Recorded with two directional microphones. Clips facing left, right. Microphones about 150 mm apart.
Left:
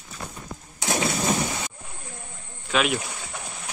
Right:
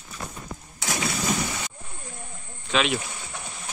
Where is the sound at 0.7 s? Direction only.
25° left (ahead or behind).